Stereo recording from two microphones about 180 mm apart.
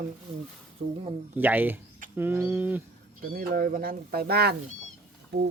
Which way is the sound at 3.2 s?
55° right (ahead or behind).